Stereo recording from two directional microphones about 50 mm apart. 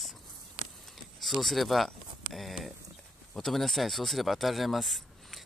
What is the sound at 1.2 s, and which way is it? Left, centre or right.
Speech, centre.